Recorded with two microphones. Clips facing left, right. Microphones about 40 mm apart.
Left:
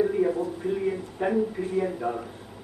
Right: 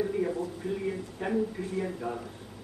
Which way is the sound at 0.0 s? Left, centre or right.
Centre.